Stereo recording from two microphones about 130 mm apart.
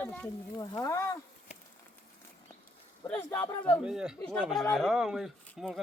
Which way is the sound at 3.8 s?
5° right (ahead or behind).